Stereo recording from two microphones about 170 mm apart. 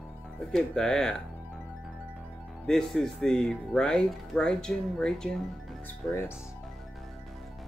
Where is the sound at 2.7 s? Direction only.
5° left (ahead or behind).